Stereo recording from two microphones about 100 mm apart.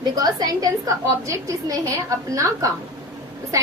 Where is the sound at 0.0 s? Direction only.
40° right (ahead or behind).